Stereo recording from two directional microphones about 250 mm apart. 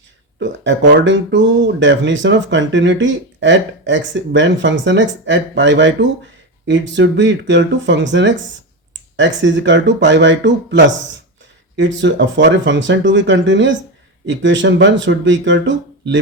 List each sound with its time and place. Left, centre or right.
0.3 s speech: right